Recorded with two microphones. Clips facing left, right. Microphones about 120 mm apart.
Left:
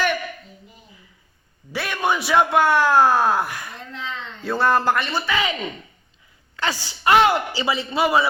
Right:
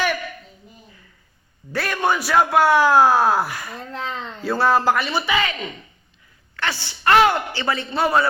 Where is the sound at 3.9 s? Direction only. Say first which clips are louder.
Right 4 dB; 45° right (ahead or behind).